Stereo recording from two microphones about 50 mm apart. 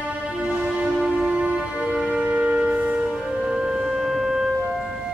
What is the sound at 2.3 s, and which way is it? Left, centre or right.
Music, right.